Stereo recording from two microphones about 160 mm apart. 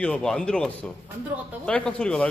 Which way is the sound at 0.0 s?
5° left (ahead or behind).